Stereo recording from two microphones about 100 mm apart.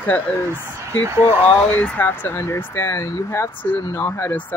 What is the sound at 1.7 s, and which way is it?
Speech, 15° left (ahead or behind).